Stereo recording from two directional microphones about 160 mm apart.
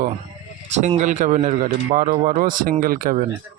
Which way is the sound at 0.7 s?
45° right (ahead or behind).